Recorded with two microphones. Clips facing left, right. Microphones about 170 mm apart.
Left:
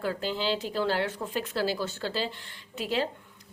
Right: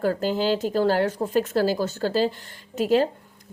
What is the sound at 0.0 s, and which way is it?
A woman's voice, 45° right (ahead or behind).